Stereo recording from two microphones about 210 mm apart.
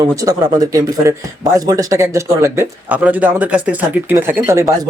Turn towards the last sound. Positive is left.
turn(degrees=-10)  # may be behind; listen again after turning